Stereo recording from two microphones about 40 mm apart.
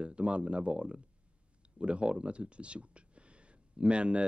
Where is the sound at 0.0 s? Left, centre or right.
Right.